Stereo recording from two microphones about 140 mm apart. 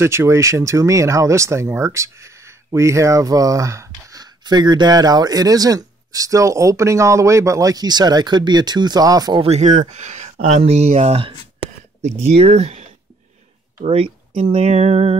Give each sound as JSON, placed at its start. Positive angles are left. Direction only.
{"t": 0.0, "sound": "speech", "side_deg": -20}
{"t": 9.4, "sound": "speech", "side_deg": -55}
{"t": 12.4, "sound": "speech", "side_deg": -45}